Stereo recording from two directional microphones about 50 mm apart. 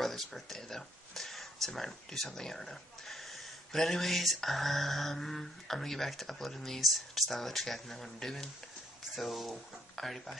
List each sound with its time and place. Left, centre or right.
0.0 s speech: centre